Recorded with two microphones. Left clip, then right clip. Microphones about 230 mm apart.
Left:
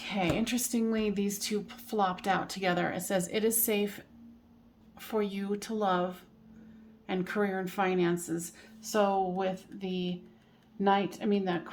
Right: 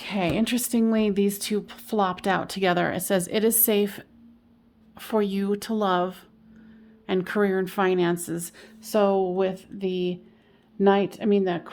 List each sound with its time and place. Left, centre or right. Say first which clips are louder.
0.0 s a woman's voice: right 5 dB; right